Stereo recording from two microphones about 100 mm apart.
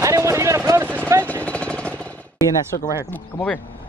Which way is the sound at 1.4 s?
10° left (ahead or behind).